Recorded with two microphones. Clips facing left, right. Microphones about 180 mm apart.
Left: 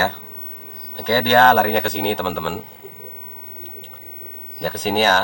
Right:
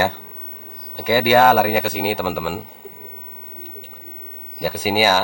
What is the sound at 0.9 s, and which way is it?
Speech, 10° right (ahead or behind).